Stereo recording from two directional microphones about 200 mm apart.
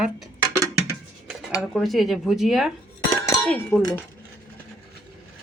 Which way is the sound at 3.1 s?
15° left (ahead or behind).